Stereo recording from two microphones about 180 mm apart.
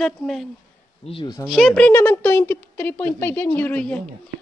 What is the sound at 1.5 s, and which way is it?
A woman's voice, centre (ahead or behind).